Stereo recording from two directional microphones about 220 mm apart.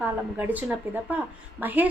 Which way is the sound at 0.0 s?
5° right (ahead or behind).